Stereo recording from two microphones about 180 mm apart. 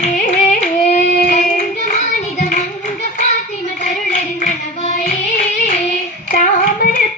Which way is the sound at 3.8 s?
45° left (ahead or behind).